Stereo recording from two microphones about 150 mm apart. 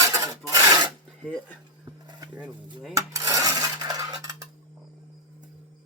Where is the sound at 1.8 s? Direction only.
25° right (ahead or behind).